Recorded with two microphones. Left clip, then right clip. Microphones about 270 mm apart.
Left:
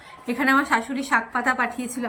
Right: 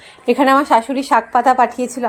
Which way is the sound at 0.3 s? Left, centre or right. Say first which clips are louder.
Right 8 dB; right.